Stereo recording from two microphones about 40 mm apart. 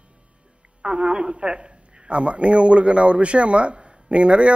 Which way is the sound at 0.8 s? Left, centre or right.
Right.